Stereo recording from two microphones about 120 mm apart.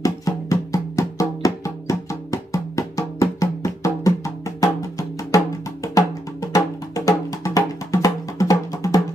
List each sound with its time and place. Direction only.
0.0 s music: 30° left (ahead or behind)